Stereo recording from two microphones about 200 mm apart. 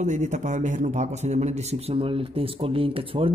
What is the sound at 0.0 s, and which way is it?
A man's voice, 35° right (ahead or behind).